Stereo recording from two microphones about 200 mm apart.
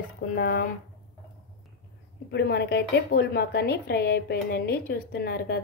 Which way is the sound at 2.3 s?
55° left (ahead or behind).